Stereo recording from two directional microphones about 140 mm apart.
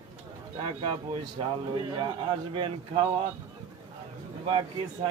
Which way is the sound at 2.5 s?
40° right (ahead or behind).